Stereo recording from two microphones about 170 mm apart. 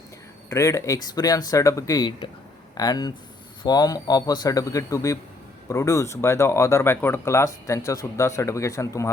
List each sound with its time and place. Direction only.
0.5 s speech: 15° left (ahead or behind)